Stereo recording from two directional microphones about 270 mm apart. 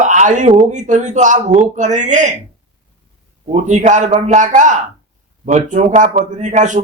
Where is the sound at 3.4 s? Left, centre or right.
Right.